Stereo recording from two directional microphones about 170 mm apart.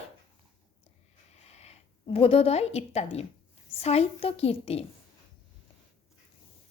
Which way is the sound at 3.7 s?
35° left (ahead or behind).